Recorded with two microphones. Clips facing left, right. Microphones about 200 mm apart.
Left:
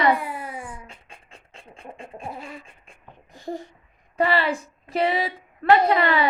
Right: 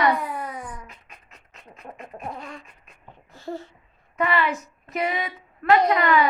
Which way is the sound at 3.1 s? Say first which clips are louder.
Left 1 dB; 15° left (ahead or behind).